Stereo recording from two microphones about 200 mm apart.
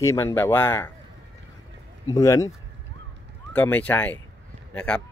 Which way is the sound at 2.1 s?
15° left (ahead or behind).